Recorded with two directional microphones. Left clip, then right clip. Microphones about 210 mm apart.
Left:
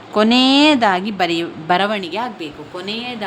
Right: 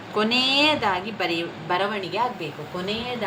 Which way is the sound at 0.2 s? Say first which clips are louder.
Left 7 dB; 55° left (ahead or behind).